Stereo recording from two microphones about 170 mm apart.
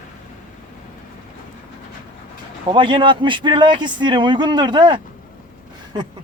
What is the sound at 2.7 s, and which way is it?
A man's voice, 30° right (ahead or behind).